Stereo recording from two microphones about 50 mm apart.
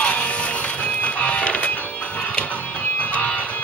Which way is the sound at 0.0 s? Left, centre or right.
Left.